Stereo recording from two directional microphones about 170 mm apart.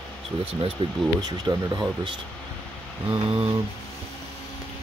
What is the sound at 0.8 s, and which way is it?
Speech, 30° right (ahead or behind).